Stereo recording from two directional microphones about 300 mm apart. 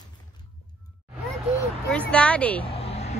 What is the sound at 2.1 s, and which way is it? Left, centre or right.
Speech, centre.